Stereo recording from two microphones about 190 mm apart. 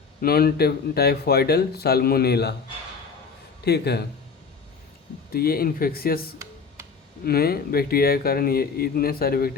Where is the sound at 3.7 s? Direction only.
60° left (ahead or behind).